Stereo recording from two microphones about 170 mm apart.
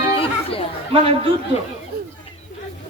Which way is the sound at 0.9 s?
35° right (ahead or behind).